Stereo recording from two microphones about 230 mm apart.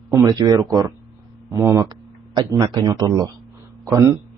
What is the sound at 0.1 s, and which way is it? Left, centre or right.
Speech, centre.